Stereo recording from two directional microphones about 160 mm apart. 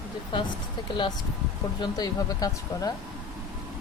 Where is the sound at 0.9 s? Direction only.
30° left (ahead or behind).